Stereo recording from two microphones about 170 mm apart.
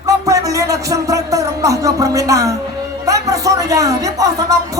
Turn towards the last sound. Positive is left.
turn(degrees=-20)  # may be behind; listen again after turning